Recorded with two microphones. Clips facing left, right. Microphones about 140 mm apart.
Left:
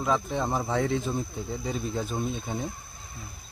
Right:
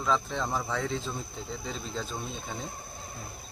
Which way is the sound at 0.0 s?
15° left (ahead or behind).